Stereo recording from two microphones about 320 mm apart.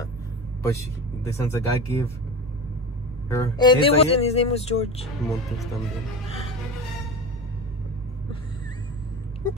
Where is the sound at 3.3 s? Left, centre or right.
Centre.